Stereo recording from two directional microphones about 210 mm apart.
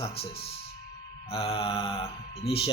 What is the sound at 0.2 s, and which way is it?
Speech, 30° left (ahead or behind).